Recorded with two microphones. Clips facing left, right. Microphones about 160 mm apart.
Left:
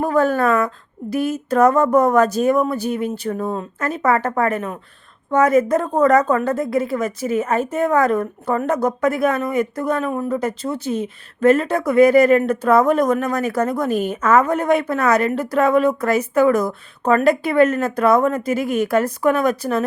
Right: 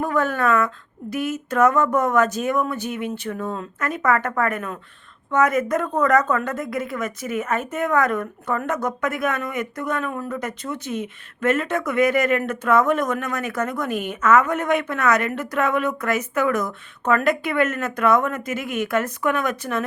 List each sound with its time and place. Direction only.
0.0 s a woman's voice: 35° left (ahead or behind)